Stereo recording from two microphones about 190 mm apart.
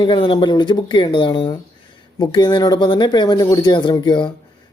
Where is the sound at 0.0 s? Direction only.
25° left (ahead or behind).